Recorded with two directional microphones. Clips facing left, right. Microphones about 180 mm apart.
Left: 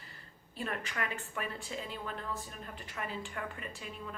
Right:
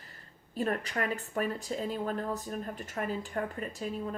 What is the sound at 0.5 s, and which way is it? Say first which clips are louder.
A woman's voice: right 7 dB; 40° right (ahead or behind).